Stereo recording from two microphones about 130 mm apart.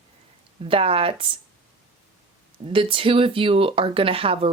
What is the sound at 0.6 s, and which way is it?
Speech, 45° right (ahead or behind).